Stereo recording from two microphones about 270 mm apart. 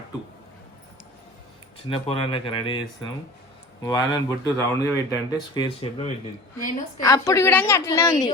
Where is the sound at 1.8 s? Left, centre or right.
Centre.